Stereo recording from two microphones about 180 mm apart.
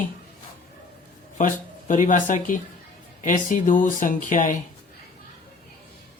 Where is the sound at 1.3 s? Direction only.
45° left (ahead or behind).